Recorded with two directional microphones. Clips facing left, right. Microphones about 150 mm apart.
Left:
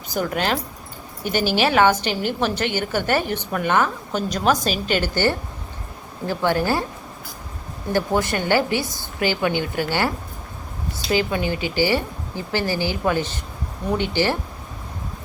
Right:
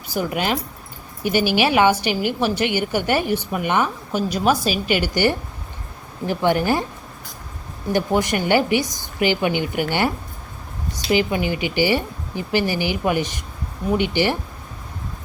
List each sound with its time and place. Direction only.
0.1 s speech: 10° right (ahead or behind)
7.9 s speech: 15° right (ahead or behind)